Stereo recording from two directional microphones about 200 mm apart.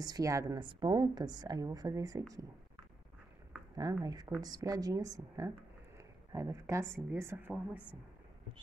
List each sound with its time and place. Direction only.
0.0 s a woman's voice: 15° right (ahead or behind)
3.7 s a woman's voice: 20° right (ahead or behind)